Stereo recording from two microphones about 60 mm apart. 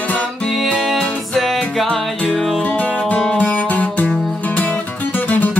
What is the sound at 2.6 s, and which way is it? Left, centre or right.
Music, left.